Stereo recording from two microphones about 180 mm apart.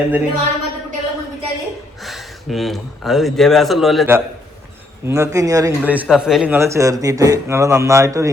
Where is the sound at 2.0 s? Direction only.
Centre (ahead or behind).